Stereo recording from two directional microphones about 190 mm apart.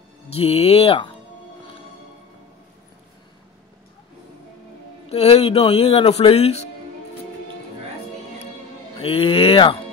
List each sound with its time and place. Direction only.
0.4 s speech: 30° left (ahead or behind)
5.1 s speech: 30° left (ahead or behind)
8.9 s speech: 30° left (ahead or behind)